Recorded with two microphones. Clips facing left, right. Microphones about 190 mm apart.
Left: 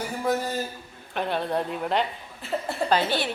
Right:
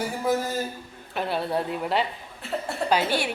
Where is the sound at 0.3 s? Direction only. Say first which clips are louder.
Even; 5° right (ahead or behind).